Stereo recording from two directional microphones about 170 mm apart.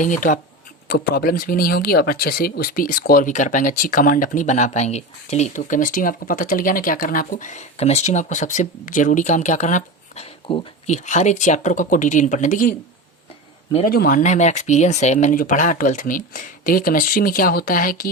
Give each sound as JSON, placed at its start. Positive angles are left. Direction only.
{"t": 0.0, "sound": "speech", "side_deg": 50}
{"t": 0.9, "sound": "speech", "side_deg": 70}
{"t": 10.9, "sound": "speech", "side_deg": 45}
{"t": 13.8, "sound": "speech", "side_deg": 60}